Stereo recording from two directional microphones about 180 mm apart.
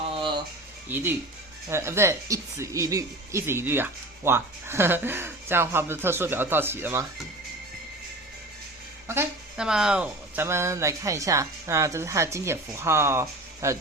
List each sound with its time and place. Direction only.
0.2 s a sound: 25° right (ahead or behind)
0.9 s speech: 10° right (ahead or behind)
9.0 s speech: 15° right (ahead or behind)